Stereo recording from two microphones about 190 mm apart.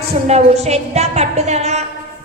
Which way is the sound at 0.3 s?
35° right (ahead or behind).